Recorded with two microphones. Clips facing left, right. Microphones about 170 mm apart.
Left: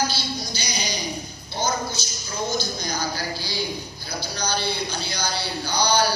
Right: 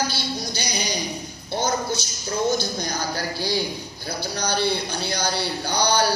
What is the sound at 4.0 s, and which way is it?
A man's voice, 60° right (ahead or behind).